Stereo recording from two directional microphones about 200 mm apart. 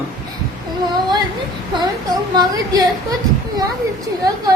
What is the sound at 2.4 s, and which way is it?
Speech, 20° right (ahead or behind).